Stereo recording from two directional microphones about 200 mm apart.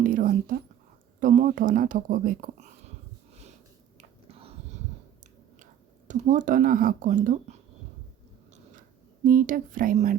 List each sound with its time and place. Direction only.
0.0 s speech: 45° right (ahead or behind)
3.9 s a sound: 30° right (ahead or behind)
6.1 s speech: 40° right (ahead or behind)
9.2 s speech: 40° right (ahead or behind)